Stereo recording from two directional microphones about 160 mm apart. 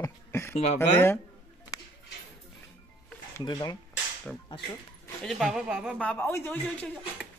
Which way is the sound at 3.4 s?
25° left (ahead or behind).